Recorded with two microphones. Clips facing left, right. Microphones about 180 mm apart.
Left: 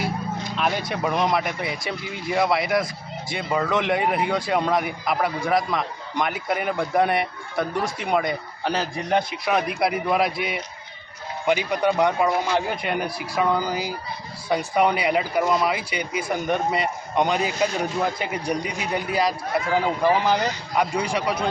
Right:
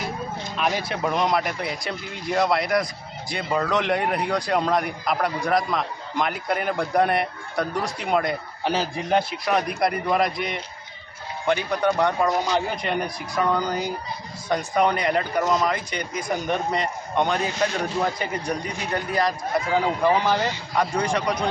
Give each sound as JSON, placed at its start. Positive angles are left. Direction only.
{"t": 0.6, "sound": "speech", "side_deg": 0}